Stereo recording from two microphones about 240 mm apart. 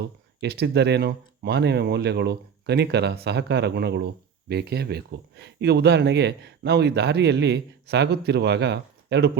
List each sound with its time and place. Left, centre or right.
0.4 s speech: right